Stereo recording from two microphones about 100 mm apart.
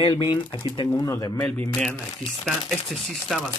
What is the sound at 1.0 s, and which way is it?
Speech, 25° left (ahead or behind).